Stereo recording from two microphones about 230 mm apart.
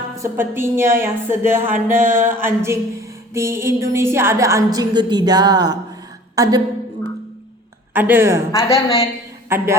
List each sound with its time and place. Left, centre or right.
0.2 s a woman's voice: centre
7.9 s speech: centre
8.5 s a woman's voice: centre
9.5 s speech: centre